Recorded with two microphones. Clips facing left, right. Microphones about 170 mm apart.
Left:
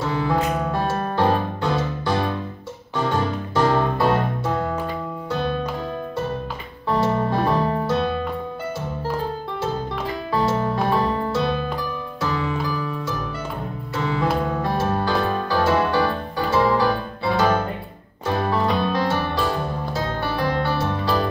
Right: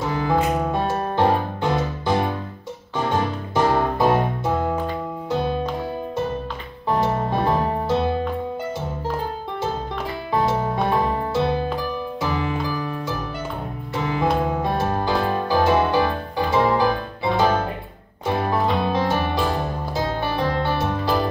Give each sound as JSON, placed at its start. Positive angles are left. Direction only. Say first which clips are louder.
{"t": 0.0, "sound": "music", "louder": "right 1 dB", "side_deg": -20}
{"t": 6.9, "sound": "music", "louder": "left 1 dB", "side_deg": -15}
{"t": 10.3, "sound": "music", "louder": "even", "side_deg": -15}